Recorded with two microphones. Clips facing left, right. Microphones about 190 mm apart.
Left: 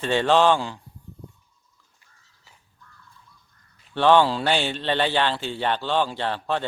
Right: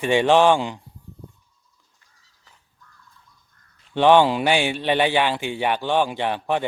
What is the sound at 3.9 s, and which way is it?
A man's voice, 15° right (ahead or behind).